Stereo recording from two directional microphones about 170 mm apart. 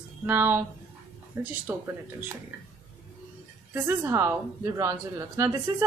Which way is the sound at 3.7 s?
15° right (ahead or behind).